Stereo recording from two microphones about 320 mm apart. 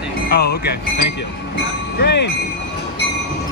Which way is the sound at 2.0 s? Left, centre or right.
Left.